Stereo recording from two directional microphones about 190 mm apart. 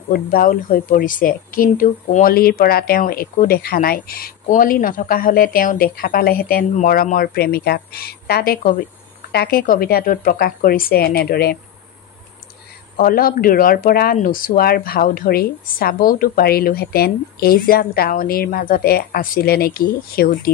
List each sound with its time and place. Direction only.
0.1 s speech: 50° left (ahead or behind)
12.9 s speech: 50° left (ahead or behind)